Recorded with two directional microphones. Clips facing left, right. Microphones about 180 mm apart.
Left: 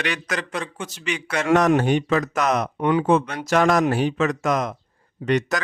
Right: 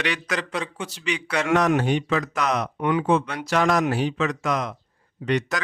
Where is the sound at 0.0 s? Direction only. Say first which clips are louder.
Even; 45° left (ahead or behind).